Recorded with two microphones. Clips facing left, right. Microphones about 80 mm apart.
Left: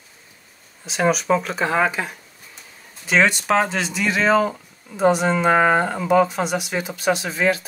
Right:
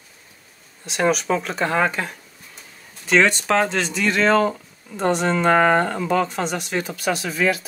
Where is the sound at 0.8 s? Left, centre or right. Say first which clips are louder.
Even; centre.